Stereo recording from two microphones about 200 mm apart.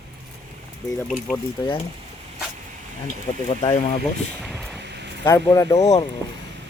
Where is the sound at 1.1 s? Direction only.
Centre (ahead or behind).